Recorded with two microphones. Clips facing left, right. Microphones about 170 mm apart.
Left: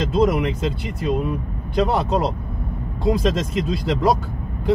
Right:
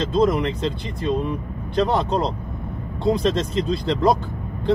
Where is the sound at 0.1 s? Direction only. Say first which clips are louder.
Even; 10° left (ahead or behind).